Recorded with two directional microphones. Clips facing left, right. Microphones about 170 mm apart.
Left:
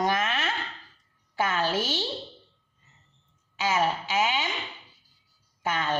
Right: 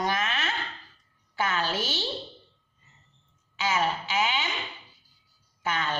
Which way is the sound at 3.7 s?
45° left (ahead or behind).